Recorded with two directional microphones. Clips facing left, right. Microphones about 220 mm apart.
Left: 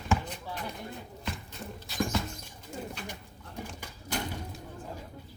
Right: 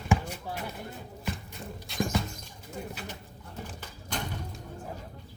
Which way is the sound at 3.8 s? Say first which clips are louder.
Left 2 dB; 10° left (ahead or behind).